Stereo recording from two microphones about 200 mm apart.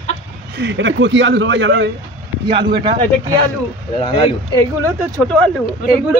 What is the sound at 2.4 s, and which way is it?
Speech, 25° right (ahead or behind).